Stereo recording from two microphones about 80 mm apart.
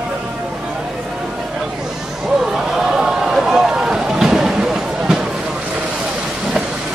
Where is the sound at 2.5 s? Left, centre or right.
Centre.